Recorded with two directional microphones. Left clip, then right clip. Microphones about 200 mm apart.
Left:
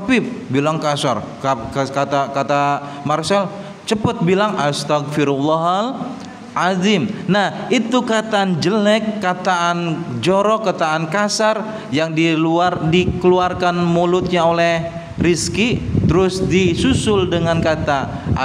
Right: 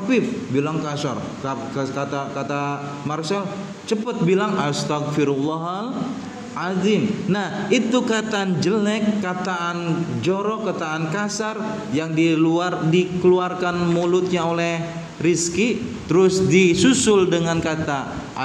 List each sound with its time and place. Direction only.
0.1 s a man's voice: 35° left (ahead or behind)